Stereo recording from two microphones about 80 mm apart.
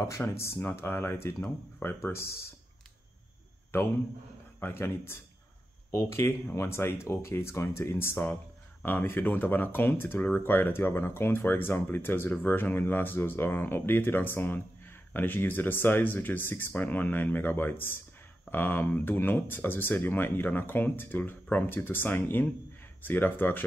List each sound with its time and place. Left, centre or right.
0.2 s speech: left
3.7 s speech: left